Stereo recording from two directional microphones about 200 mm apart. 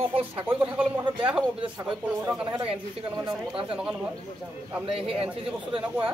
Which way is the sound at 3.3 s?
25° right (ahead or behind).